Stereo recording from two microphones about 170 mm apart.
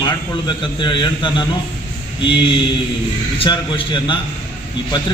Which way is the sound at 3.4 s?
30° left (ahead or behind).